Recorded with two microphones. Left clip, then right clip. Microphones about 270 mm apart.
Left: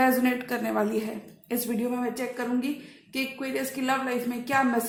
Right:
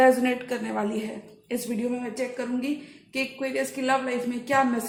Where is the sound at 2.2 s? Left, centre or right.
Centre.